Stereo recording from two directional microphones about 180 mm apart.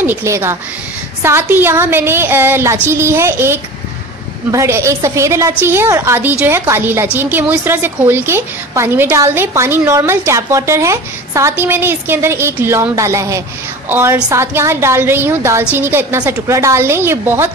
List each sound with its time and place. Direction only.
0.0 s a woman's voice: 15° right (ahead or behind)